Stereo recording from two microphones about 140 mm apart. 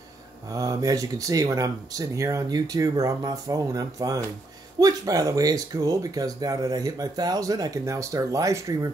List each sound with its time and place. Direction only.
0.5 s speech: 25° right (ahead or behind)